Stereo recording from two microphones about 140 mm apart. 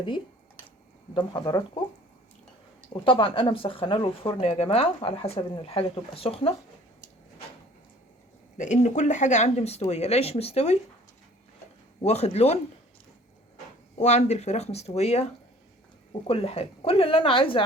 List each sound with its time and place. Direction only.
1.1 s speech: 30° left (ahead or behind)
2.9 s speech: 40° left (ahead or behind)
8.5 s speech: 60° left (ahead or behind)
12.0 s speech: 50° left (ahead or behind)
14.0 s speech: 55° left (ahead or behind)